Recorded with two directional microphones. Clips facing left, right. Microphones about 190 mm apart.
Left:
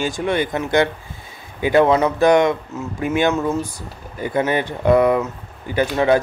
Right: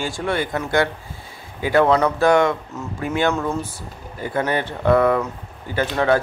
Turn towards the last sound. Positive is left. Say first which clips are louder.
# left 2 dB
turn(degrees=15)  # may be behind; listen again after turning